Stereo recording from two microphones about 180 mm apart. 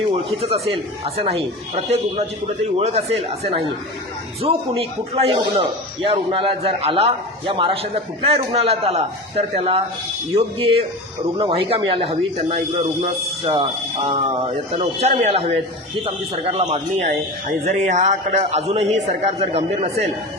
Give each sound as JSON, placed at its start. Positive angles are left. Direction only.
{"t": 0.4, "sound": "a man's voice", "side_deg": -35}
{"t": 2.7, "sound": "a man's voice", "side_deg": -35}